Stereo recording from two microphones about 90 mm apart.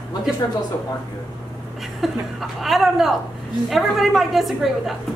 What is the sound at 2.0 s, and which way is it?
A woman's voice, centre (ahead or behind).